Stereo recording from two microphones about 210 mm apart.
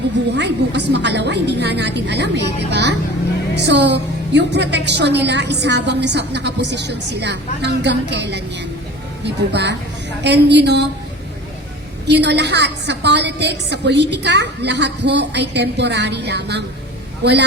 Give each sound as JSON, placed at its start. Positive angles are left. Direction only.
{"t": 0.3, "sound": "a woman's voice", "side_deg": -55}
{"t": 9.5, "sound": "a woman's voice", "side_deg": -55}
{"t": 12.0, "sound": "a woman's voice", "side_deg": -55}